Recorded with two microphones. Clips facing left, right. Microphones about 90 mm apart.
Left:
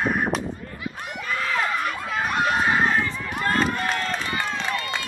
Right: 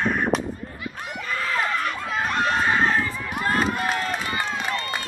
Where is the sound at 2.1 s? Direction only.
5° left (ahead or behind).